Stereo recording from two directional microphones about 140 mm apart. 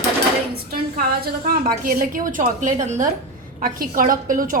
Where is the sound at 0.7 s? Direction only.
90° right; by 3.1 s 60° right (ahead or behind).